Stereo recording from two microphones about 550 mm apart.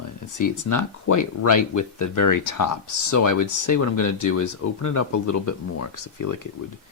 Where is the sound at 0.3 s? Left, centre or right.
Left.